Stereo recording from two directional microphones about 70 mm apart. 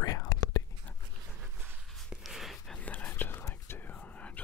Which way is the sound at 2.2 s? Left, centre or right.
Centre.